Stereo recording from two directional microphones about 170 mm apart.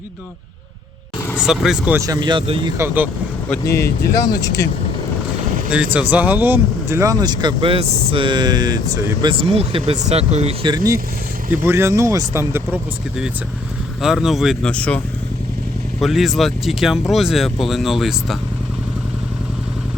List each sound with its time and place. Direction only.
1.4 s speech: 5° right (ahead or behind)
2.0 s speech: 25° right (ahead or behind)
2.7 s speech: 15° right (ahead or behind)
3.6 s speech: 20° left (ahead or behind)
5.7 s speech: 5° right (ahead or behind)
9.4 s speech: 35° right (ahead or behind)
11.6 s speech: 15° right (ahead or behind)
14.0 s speech: 5° right (ahead or behind)